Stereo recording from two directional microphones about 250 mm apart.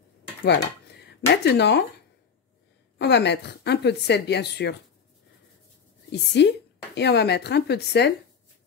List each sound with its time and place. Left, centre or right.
0.4 s dishes: left
1.3 s a woman's voice: left
3.0 s a woman's voice: left
6.4 s a woman's voice: left